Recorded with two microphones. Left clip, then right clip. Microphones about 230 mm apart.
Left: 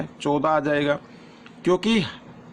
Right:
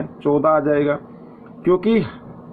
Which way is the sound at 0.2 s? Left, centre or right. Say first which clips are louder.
Right 5 dB; left.